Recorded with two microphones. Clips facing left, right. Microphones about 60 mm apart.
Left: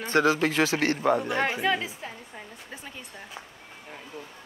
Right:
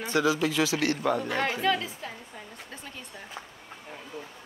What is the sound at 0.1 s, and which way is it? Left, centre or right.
Speech, left.